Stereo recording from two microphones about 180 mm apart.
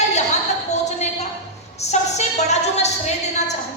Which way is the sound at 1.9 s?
40° left (ahead or behind).